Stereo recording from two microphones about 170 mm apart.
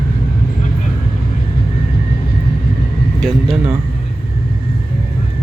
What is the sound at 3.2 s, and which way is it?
Speech, centre (ahead or behind).